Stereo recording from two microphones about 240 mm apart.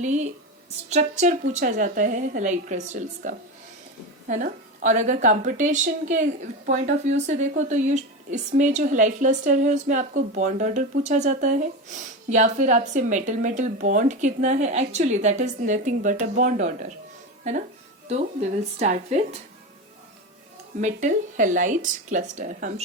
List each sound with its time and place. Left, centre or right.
0.0 s speech: right
18.1 s speech: right
20.8 s speech: right